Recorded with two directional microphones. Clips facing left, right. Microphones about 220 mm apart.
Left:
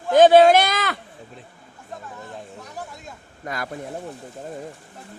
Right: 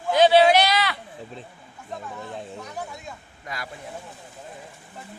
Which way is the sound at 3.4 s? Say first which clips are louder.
Left 6 dB; 50° left (ahead or behind).